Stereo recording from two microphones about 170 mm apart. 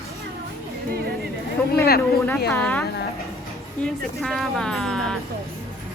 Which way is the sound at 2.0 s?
10° left (ahead or behind).